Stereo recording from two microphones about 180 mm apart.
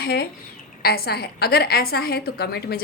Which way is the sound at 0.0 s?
60° left (ahead or behind).